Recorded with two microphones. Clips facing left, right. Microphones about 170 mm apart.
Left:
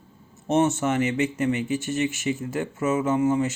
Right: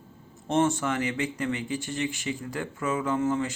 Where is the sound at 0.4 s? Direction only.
20° left (ahead or behind).